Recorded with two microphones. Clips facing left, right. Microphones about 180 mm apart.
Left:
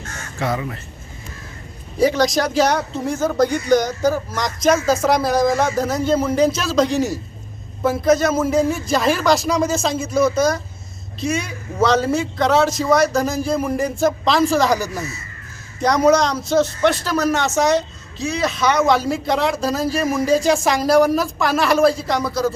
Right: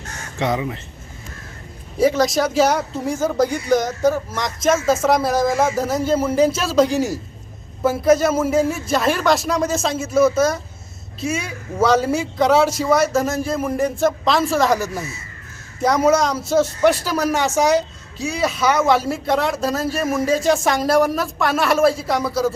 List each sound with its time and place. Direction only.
0.3 s speech: 20° right (ahead or behind)
2.0 s speech: 5° right (ahead or behind)